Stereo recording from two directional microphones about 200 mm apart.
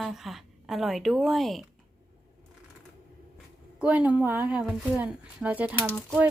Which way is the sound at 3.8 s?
5° right (ahead or behind).